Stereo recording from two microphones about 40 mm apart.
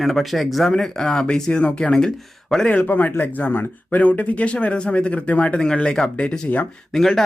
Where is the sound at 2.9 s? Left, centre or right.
Left.